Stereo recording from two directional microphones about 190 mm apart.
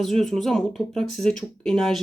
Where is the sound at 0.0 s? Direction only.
Centre (ahead or behind).